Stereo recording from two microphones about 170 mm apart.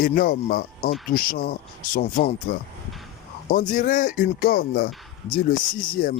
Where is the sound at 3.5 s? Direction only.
50° left (ahead or behind).